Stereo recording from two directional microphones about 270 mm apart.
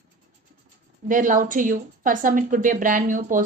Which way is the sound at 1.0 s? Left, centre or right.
Right.